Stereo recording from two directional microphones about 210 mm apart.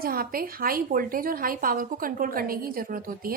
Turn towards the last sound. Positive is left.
turn(degrees=-40)  # may be behind; listen again after turning